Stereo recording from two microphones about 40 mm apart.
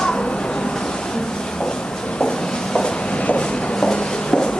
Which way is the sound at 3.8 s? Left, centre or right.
Centre.